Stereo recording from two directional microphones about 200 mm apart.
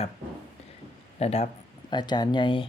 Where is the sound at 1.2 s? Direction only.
30° left (ahead or behind).